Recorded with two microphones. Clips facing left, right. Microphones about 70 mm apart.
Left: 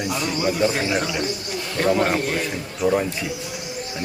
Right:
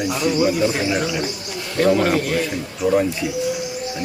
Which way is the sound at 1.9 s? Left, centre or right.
Centre.